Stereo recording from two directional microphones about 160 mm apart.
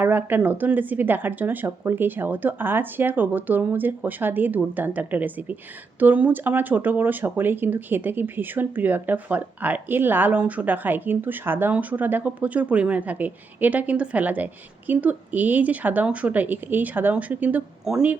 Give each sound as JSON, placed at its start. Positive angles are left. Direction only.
{"t": 0.0, "sound": "speech", "side_deg": -10}